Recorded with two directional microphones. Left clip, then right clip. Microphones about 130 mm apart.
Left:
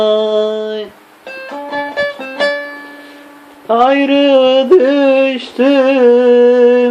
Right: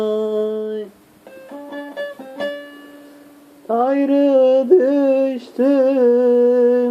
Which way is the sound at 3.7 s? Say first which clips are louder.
Left 7 dB; 25° right (ahead or behind).